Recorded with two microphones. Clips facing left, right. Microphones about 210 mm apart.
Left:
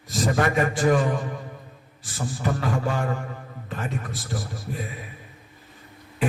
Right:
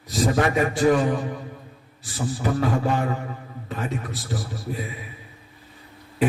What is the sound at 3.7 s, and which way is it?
A man's voice, 45° left (ahead or behind).